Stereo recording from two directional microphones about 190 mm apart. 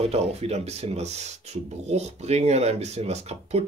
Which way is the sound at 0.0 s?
30° right (ahead or behind).